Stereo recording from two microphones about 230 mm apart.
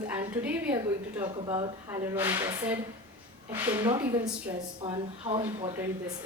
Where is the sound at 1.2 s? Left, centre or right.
Centre.